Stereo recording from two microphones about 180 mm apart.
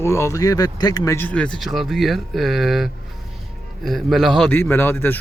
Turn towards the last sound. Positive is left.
turn(degrees=10)  # may be behind; listen again after turning